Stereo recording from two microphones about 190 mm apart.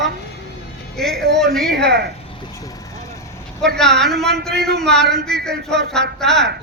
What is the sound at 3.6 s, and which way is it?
A man's voice, centre (ahead or behind).